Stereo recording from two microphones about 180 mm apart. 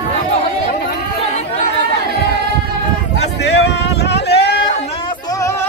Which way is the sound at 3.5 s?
70° left (ahead or behind).